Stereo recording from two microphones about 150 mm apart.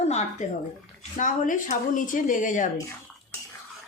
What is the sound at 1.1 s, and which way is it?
A woman's voice, 60° left (ahead or behind).